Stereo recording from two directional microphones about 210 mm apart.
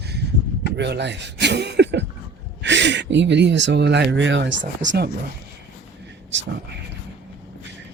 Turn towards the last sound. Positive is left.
turn(degrees=-60)  # may be behind; listen again after turning